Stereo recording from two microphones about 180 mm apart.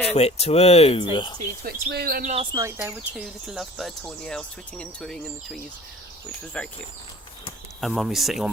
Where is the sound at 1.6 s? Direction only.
60° right (ahead or behind).